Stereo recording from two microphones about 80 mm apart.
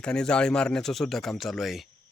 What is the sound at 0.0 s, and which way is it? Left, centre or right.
A man's voice, centre.